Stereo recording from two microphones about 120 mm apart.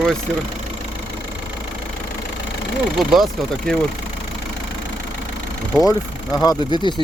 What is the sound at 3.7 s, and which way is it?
Speech, 5° left (ahead or behind).